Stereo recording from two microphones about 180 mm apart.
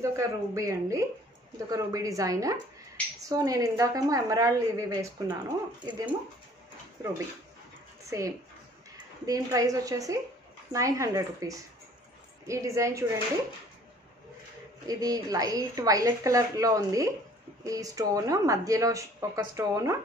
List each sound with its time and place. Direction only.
0.0 s speech: 15° right (ahead or behind)
8.0 s a sound: 15° right (ahead or behind)
8.9 s speech: 20° right (ahead or behind)
14.9 s speech: 20° right (ahead or behind)